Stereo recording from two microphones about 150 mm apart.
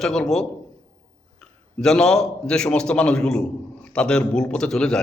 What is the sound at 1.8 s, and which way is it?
A man's voice, 5° left (ahead or behind).